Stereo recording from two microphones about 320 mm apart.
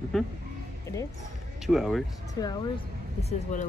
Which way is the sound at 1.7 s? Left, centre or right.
Centre.